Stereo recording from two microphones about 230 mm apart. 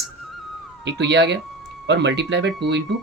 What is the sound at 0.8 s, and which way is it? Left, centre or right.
Speech, right.